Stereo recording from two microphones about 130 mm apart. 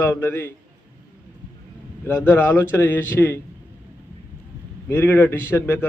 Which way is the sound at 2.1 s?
15° left (ahead or behind).